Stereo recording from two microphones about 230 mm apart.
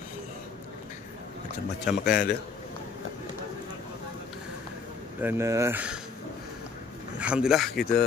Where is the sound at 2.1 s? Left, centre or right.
Left.